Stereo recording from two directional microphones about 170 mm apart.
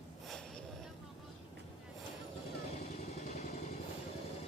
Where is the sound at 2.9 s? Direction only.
40° left (ahead or behind).